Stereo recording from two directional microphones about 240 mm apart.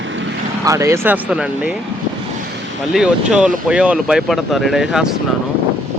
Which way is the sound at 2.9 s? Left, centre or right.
Centre.